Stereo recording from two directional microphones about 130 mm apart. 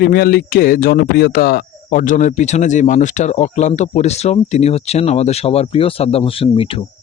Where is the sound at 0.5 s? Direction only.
90° left.